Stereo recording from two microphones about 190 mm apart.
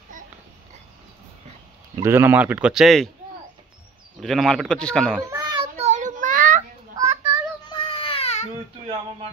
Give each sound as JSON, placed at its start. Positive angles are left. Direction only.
{"t": 2.0, "sound": "speech", "side_deg": -10}
{"t": 4.2, "sound": "speech", "side_deg": 0}
{"t": 5.3, "sound": "a sound", "side_deg": -20}
{"t": 5.8, "sound": "child singing", "side_deg": -40}
{"t": 7.0, "sound": "a sound", "side_deg": -20}
{"t": 7.7, "sound": "baby cry", "side_deg": 25}